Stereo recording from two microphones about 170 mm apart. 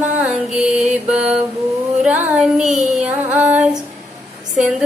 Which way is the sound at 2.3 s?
10° right (ahead or behind).